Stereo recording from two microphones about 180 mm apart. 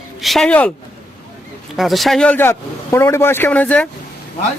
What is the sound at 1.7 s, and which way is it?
Speech, centre (ahead or behind).